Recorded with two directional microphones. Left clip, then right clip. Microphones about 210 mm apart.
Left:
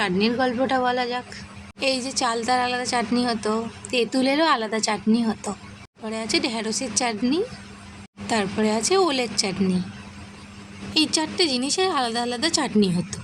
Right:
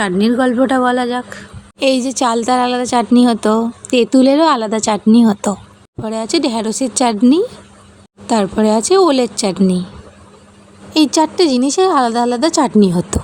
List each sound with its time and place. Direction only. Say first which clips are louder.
0.0 s a woman's voice: right 7 dB; 25° right (ahead or behind)
1.8 s a woman's voice: right 9 dB; 40° right (ahead or behind)
10.9 s a woman's voice: right 9 dB; 40° right (ahead or behind)